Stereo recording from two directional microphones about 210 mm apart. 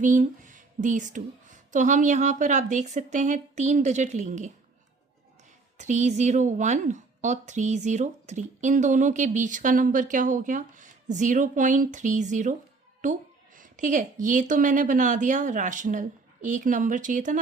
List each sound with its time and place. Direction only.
0.0 s a woman's voice: 40° right (ahead or behind)
5.7 s a woman's voice: 35° right (ahead or behind)